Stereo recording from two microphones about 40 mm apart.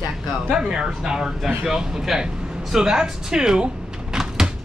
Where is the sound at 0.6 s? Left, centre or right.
Centre.